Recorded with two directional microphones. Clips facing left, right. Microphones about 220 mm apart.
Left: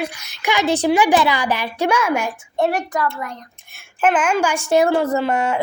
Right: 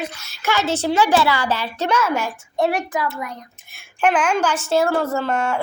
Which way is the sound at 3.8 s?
5° left (ahead or behind).